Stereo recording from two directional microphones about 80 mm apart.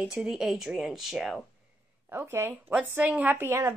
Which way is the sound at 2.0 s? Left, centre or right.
Right.